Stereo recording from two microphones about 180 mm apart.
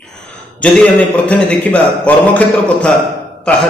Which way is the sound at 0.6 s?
10° left (ahead or behind).